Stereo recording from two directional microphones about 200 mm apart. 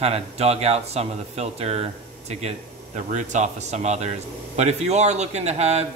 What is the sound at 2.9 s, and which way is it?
A man's voice, 35° right (ahead or behind).